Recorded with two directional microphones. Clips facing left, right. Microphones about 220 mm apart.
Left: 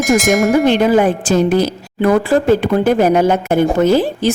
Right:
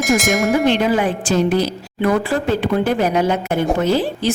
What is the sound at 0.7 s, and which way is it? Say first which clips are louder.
A woman's voice: left 5 dB; 45° left (ahead or behind).